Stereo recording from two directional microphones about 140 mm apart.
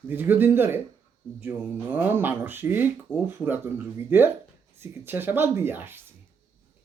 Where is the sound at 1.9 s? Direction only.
15° right (ahead or behind).